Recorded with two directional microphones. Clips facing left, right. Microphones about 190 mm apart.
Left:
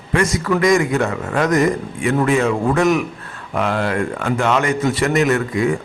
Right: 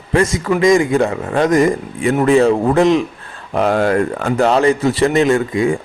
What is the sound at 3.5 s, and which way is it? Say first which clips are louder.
A man's voice: right 5 dB; 40° right (ahead or behind).